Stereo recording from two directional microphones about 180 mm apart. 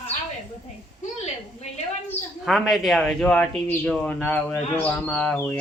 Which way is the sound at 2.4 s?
Centre (ahead or behind).